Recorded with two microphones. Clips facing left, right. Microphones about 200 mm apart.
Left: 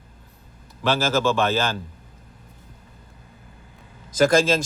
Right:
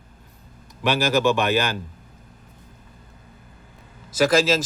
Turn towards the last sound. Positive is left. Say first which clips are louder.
# left 1 dB
turn(degrees=-5)  # may be behind; listen again after turning